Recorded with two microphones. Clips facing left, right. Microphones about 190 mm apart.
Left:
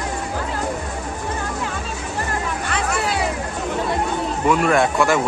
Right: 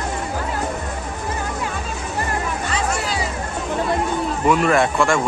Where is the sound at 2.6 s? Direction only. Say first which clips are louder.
Left 2 dB; 60° left (ahead or behind).